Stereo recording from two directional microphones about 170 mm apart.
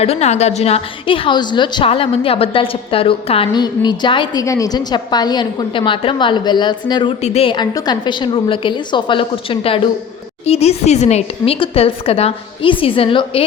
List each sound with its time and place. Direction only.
0.0 s a woman's voice: 40° left (ahead or behind)
7.2 s a woman's voice: 40° left (ahead or behind)